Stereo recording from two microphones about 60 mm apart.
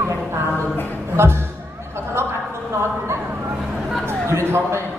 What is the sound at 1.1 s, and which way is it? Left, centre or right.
Speech, right.